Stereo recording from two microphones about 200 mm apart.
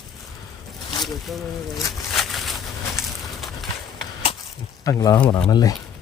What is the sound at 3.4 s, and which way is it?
Horse, centre (ahead or behind).